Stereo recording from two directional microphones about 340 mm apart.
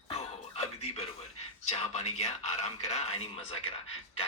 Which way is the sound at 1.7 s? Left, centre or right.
Centre.